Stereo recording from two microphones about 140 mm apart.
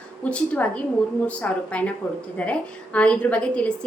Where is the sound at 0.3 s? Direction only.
10° left (ahead or behind).